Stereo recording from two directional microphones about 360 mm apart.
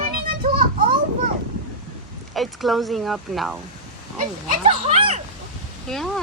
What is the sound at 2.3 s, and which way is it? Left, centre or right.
Speech, centre.